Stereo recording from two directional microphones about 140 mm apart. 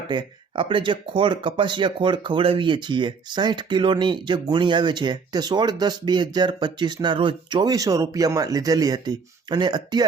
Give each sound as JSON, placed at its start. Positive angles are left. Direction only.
{"t": 0.1, "sound": "speech", "side_deg": -35}